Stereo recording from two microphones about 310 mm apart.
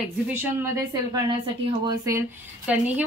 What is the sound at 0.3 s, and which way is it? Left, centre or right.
Speech, centre.